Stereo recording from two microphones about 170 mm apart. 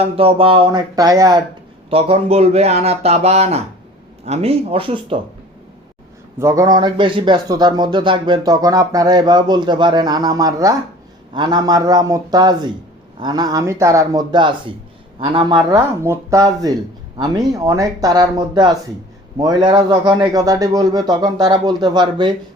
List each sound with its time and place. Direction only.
0.0 s speech: 35° right (ahead or behind)
1.9 s speech: 35° right (ahead or behind)
6.4 s speech: 20° right (ahead or behind)